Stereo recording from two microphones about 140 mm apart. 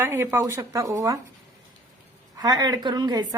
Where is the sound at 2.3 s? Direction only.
30° right (ahead or behind).